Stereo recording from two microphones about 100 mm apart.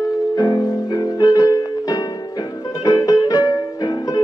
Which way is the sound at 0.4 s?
35° left (ahead or behind).